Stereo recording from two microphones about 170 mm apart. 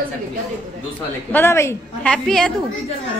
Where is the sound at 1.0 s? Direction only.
10° left (ahead or behind).